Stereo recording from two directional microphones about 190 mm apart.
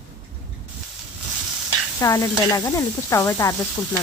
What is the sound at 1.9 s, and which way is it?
Stir, 15° left (ahead or behind).